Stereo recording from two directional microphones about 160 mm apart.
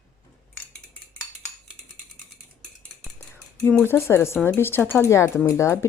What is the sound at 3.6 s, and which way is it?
Speech, 10° left (ahead or behind).